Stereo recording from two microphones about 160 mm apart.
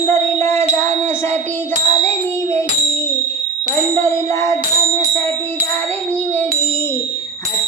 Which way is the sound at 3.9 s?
15° left (ahead or behind).